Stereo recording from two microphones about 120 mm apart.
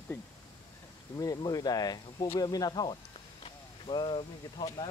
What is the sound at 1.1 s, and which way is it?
Speech, 30° left (ahead or behind).